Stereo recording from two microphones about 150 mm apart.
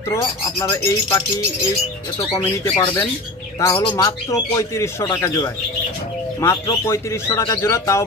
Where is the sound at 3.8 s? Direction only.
25° left (ahead or behind).